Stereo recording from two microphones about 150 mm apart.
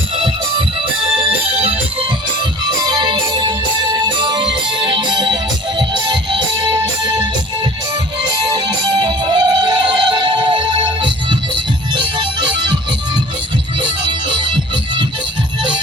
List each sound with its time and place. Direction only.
1.5 s music: 40° right (ahead or behind)
2.6 s music: 30° right (ahead or behind)
8.3 s music: 30° right (ahead or behind)
13.8 s music: 30° right (ahead or behind)